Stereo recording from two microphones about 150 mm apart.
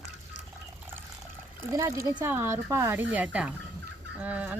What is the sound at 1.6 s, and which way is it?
Speech, 20° right (ahead or behind).